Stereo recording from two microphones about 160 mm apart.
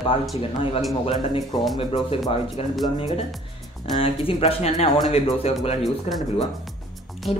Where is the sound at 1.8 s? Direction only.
35° left (ahead or behind).